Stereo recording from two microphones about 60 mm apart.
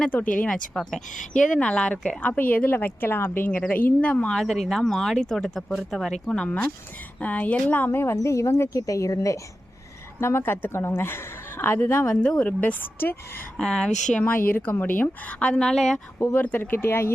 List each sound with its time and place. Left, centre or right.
0.4 s speech: centre
0.8 s speech: centre
1.5 s speech: centre
4.3 s speech: centre
6.2 s speech: centre
7.9 s speech: left
8.7 s speech: left
10.2 s a woman's voice: left
12.0 s speech: left
13.6 s speech: centre
14.3 s speech: left; by 16.0 s centre
16.3 s a woman's voice: left